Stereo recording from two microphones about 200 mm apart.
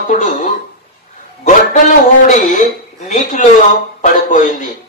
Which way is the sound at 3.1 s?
40° left (ahead or behind).